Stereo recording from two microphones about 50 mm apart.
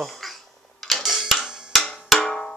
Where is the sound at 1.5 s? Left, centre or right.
Centre.